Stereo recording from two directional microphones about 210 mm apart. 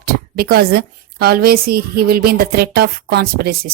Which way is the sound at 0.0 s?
45° right (ahead or behind).